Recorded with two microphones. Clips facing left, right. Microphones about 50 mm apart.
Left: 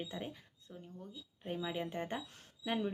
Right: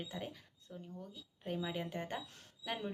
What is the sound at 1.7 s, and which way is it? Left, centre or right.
Speech, centre.